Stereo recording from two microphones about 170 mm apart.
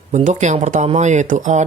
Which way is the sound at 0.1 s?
45° right (ahead or behind).